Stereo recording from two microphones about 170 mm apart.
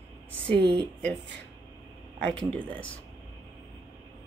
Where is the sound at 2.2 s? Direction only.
5° left (ahead or behind).